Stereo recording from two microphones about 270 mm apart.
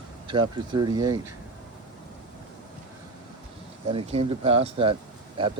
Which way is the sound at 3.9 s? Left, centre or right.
Right.